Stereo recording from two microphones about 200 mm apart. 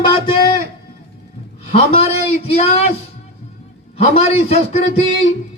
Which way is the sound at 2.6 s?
30° left (ahead or behind).